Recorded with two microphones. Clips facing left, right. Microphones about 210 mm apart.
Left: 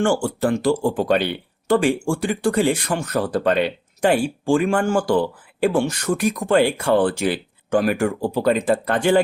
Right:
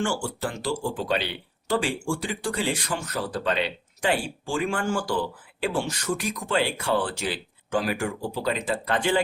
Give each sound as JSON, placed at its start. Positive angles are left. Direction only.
{"t": 0.0, "sound": "speech", "side_deg": 55}